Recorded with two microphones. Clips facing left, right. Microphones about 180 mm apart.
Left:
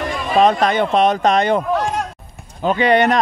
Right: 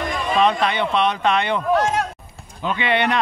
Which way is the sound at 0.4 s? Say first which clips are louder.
Left 5 dB; 45° left (ahead or behind).